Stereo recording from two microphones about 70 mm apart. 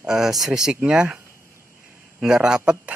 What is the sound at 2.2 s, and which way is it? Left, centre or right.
Speech, centre.